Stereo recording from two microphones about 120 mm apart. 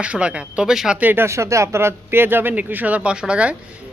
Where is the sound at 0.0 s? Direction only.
10° right (ahead or behind).